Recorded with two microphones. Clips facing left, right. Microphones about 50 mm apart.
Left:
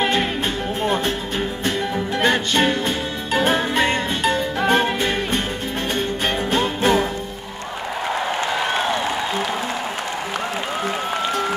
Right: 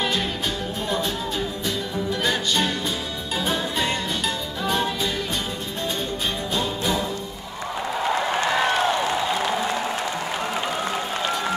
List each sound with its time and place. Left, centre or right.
0.0 s music: left
0.8 s speech: left
2.1 s music: left